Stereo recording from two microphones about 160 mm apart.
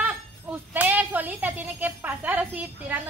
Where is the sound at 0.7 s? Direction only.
10° right (ahead or behind).